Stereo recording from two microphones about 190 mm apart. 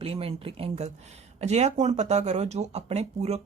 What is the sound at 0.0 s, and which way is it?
Speech, 30° right (ahead or behind).